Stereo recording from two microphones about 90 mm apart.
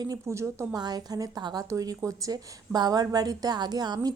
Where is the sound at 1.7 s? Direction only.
40° right (ahead or behind).